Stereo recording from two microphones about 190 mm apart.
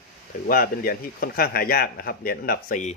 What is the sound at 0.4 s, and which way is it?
Speech, 50° left (ahead or behind).